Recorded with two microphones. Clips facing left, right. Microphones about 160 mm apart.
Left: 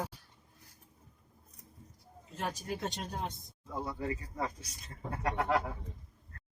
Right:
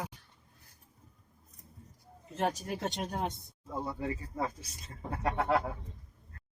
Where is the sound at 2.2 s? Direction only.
60° right (ahead or behind).